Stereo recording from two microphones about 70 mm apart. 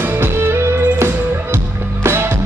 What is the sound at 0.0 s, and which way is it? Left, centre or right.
Music, right.